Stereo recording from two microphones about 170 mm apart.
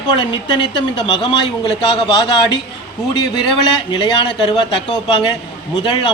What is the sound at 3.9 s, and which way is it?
A woman's voice, 25° left (ahead or behind).